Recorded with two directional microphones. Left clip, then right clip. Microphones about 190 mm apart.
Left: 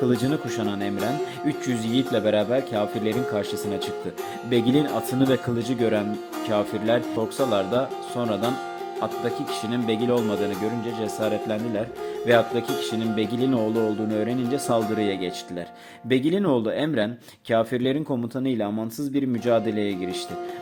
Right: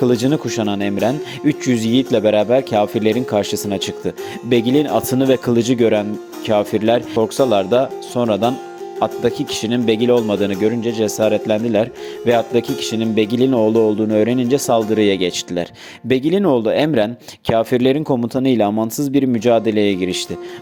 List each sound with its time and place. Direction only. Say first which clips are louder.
0.0 s speech: right 7 dB; 35° right (ahead or behind)